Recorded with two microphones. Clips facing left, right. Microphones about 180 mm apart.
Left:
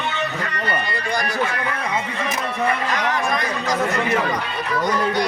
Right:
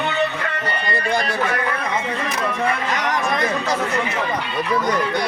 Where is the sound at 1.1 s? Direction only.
25° right (ahead or behind).